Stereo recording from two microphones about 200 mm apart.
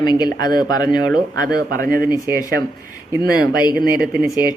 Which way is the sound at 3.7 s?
50° right (ahead or behind).